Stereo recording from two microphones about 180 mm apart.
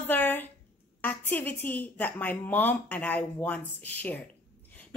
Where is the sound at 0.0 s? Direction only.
10° left (ahead or behind).